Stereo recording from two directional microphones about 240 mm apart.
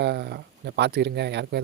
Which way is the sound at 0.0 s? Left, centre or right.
Right.